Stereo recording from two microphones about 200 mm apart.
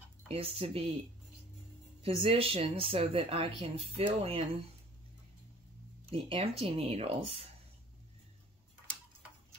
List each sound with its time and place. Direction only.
0.3 s speech: 30° right (ahead or behind)
2.0 s speech: 30° right (ahead or behind)
6.0 s speech: 30° right (ahead or behind)